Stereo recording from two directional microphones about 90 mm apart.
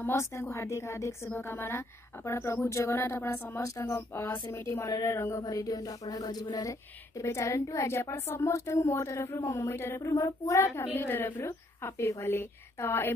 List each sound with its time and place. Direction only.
0.0 s a woman's voice: 30° left (ahead or behind)
3.6 s a woman's voice: 40° left (ahead or behind)
4.1 s a woman's voice: 25° left (ahead or behind)
5.4 s a sound: 40° left (ahead or behind)
6.7 s a woman's voice: 35° left (ahead or behind)